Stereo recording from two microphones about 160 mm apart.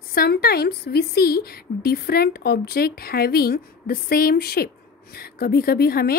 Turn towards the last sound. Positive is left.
turn(degrees=75)  # may be behind; listen again after turning